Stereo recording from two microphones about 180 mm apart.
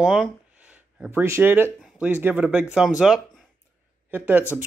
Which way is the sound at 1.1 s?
15° right (ahead or behind).